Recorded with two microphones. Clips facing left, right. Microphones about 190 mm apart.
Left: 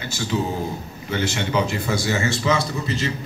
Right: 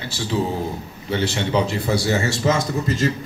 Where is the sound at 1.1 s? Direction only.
35° right (ahead or behind).